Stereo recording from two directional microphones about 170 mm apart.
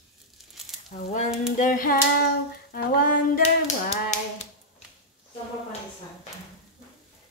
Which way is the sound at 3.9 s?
40° left (ahead or behind).